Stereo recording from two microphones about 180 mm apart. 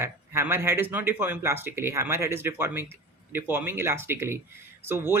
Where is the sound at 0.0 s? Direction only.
10° right (ahead or behind).